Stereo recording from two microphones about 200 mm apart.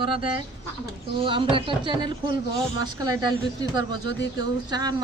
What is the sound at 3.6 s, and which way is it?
Speech, 65° left (ahead or behind).